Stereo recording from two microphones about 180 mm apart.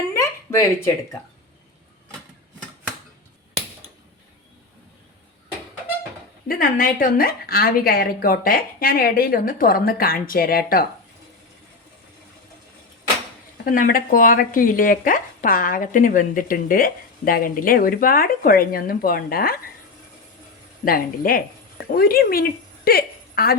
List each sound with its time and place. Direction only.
0.1 s a sound: 15° left (ahead or behind)
6.5 s a woman's voice: 55° left (ahead or behind)
13.7 s a woman's voice: 50° left (ahead or behind)
20.8 s a woman's voice: 55° left (ahead or behind)